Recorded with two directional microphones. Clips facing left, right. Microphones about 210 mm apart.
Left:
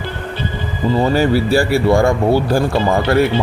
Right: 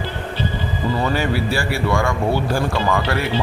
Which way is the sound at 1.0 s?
40° left (ahead or behind).